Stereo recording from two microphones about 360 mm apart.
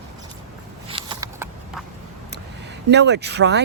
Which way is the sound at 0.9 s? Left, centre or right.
Centre.